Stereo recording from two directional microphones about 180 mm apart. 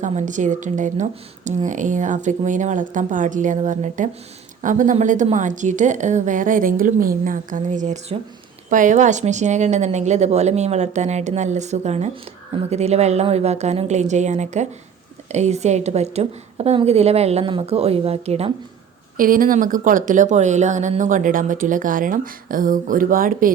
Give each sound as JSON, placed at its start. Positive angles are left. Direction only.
{"t": 0.0, "sound": "a woman's voice", "side_deg": -40}
{"t": 19.1, "sound": "speech", "side_deg": -50}